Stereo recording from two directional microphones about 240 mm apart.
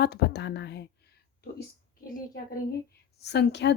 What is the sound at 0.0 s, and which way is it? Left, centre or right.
Speech, left.